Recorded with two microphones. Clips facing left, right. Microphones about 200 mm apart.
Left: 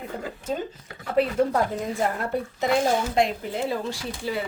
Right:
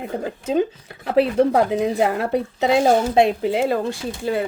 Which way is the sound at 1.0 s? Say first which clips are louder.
Right 5 dB; 75° right (ahead or behind).